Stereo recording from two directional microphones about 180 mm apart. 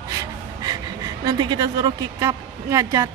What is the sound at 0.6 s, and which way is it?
Speech, 20° right (ahead or behind).